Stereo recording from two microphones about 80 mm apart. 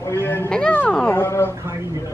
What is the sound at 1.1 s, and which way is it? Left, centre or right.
Speech, left.